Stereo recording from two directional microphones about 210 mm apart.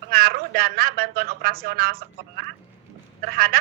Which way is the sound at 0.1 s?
45° right (ahead or behind).